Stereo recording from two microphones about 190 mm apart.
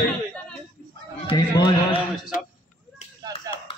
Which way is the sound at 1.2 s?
30° left (ahead or behind).